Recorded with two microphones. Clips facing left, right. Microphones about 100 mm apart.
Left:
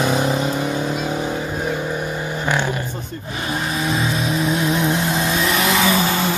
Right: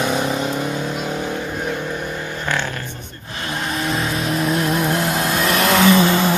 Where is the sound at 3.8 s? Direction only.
5° left (ahead or behind).